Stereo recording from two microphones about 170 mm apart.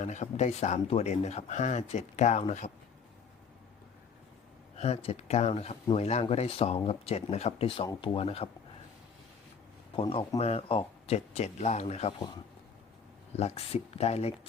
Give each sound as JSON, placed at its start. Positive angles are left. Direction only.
{"t": 0.0, "sound": "speech", "side_deg": 45}
{"t": 4.8, "sound": "speech", "side_deg": 40}
{"t": 9.9, "sound": "speech", "side_deg": 30}
{"t": 13.3, "sound": "speech", "side_deg": 40}